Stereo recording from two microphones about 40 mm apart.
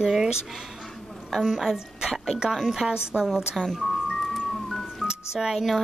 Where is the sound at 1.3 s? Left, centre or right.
Centre.